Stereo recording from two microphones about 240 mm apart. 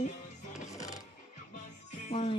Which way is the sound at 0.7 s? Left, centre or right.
Centre.